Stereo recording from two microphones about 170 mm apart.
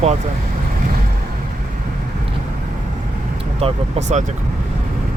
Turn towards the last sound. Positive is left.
turn(degrees=-40)  # may be behind; listen again after turning